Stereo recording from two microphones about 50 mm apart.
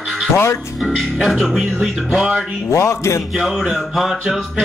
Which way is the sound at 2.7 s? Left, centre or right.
Left.